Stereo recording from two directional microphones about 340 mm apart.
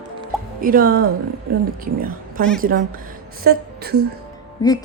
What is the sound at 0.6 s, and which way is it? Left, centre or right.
A woman's voice, right.